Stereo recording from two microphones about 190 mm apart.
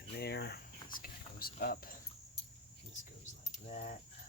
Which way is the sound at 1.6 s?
50° left (ahead or behind).